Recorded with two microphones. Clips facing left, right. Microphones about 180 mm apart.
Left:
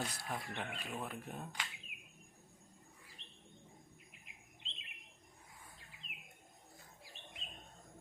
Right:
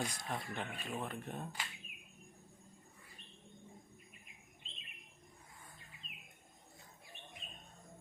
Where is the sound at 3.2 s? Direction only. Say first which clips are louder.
Right 2 dB; 80° left.